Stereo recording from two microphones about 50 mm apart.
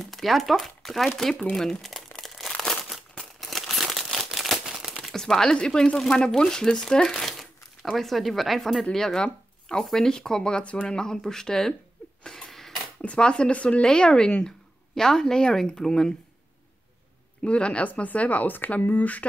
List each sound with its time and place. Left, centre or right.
0.0 s speech: centre
2.1 s crumpling: centre
3.3 s crumpling: centre
4.6 s crumpling: centre
5.1 s speech: centre
7.2 s crumpling: centre
8.0 s speech: centre
8.9 s speech: centre
11.0 s speech: centre
12.4 s a sound: centre
13.0 s speech: left
17.4 s speech: left